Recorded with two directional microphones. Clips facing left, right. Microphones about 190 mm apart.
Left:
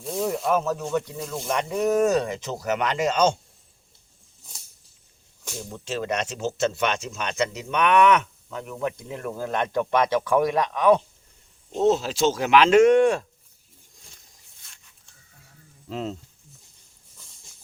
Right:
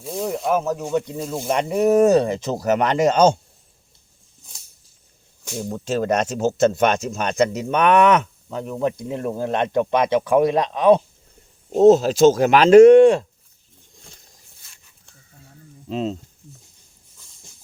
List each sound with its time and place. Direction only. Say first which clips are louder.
0.0 s snake: right 1 dB; centre (ahead or behind)
0.5 s speech: right 5 dB; 15° right (ahead or behind); by 3.3 s 40° right (ahead or behind)
5.6 s speech: right 7 dB; 45° right (ahead or behind); by 11.0 s 25° right (ahead or behind)
11.7 s speech: right 9 dB; 40° right (ahead or behind)
15.9 s speech: right 6 dB; 20° right (ahead or behind)